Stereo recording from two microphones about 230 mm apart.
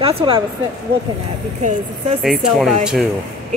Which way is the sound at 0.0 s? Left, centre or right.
Right.